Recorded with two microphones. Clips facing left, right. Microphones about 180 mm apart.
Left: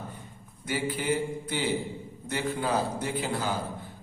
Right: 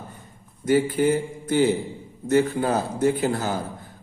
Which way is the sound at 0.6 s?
45° right (ahead or behind).